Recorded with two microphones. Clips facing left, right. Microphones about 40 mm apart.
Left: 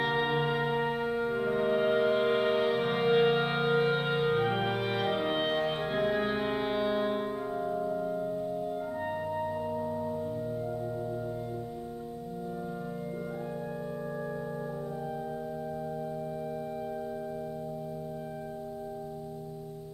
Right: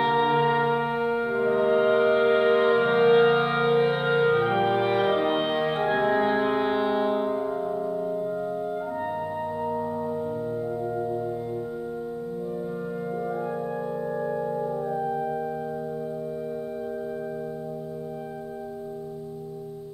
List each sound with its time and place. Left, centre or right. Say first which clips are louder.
0.0 s music: right 7 dB; centre
8.5 s music: right 4 dB; right
9.4 s singing bowl: right 4 dB; centre
10.8 s music: right 7 dB; right
14.1 s organ: right 8 dB; centre